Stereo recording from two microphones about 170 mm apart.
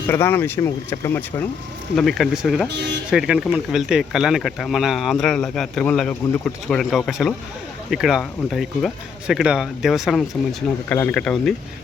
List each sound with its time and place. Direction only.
0.1 s speech: 10° left (ahead or behind)
2.0 s speech: centre (ahead or behind)
2.6 s speech: 90° right
3.1 s speech: 5° right (ahead or behind)